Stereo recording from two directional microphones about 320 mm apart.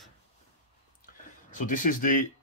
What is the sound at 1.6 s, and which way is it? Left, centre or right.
Speech, left.